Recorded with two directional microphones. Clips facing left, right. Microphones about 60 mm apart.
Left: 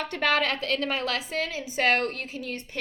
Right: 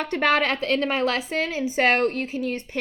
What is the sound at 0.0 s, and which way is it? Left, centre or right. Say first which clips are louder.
A woman's voice: right 4 dB; right.